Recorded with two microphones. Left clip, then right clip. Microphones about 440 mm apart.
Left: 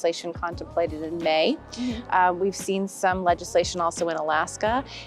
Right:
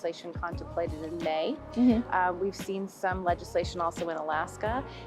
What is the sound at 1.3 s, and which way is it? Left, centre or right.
Speech, left.